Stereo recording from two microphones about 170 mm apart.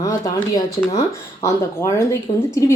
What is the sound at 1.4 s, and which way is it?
A woman's voice, 20° left (ahead or behind).